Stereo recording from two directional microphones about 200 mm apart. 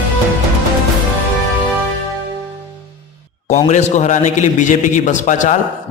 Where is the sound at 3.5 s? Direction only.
35° left (ahead or behind).